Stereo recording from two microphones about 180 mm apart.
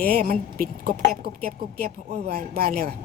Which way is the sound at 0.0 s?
55° right (ahead or behind).